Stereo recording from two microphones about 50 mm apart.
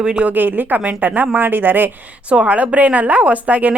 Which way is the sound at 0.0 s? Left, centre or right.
Centre.